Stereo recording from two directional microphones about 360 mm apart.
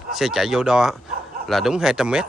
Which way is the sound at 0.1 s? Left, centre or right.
Centre.